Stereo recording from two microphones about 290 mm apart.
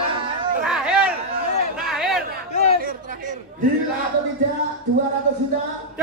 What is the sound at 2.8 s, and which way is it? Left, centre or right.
Chatter, right.